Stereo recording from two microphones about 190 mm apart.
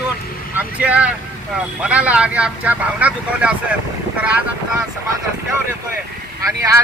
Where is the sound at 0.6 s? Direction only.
5° right (ahead or behind).